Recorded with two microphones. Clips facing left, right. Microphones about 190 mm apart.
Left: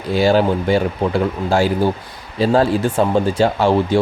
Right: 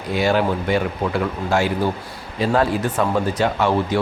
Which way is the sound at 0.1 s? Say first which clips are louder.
Left 4 dB; 30° left (ahead or behind).